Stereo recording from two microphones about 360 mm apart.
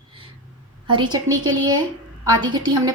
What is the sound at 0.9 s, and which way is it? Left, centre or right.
A woman's voice, centre.